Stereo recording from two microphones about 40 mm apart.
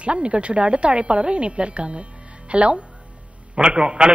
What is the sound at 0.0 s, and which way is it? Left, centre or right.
A man's voice, right.